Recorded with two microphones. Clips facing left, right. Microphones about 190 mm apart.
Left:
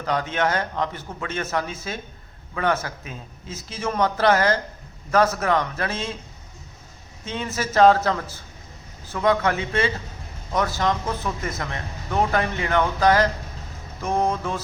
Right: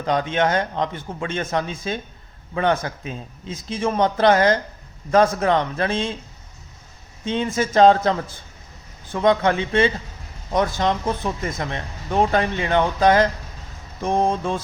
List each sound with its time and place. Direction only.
0.0 s speech: 20° right (ahead or behind)
7.3 s speech: 25° right (ahead or behind)
9.1 s speech: 25° right (ahead or behind)